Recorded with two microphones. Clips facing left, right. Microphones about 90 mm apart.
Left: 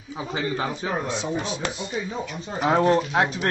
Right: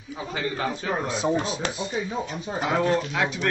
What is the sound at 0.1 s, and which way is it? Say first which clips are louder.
Speech: left 2 dB; 20° left (ahead or behind).